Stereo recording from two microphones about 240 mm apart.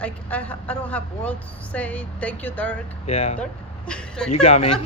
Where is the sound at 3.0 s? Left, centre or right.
Left.